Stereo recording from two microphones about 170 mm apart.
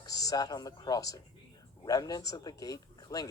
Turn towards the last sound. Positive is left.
turn(degrees=20)  # may be behind; listen again after turning